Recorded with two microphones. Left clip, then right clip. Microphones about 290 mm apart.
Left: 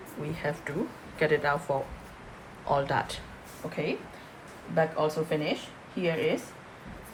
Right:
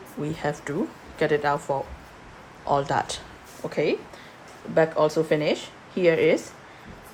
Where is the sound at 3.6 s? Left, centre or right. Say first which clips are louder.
Right 8 dB; right.